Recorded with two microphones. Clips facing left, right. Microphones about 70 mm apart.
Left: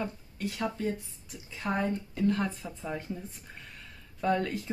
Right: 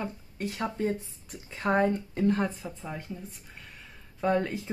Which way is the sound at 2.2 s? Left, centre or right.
Right.